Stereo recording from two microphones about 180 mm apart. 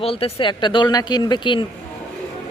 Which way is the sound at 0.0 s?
30° left (ahead or behind).